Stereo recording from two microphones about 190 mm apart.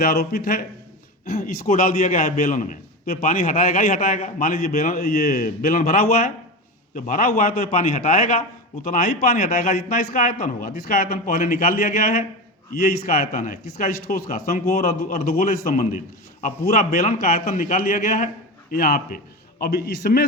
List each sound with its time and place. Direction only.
0.0 s a man's voice: 55° left (ahead or behind)